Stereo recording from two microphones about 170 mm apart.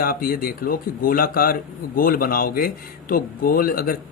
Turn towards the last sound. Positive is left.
turn(degrees=55)  # may be behind; listen again after turning